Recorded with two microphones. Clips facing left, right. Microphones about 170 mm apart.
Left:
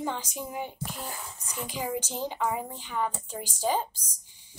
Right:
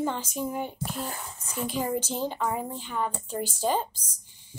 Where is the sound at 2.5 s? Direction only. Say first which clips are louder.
Right 2 dB; 50° right (ahead or behind).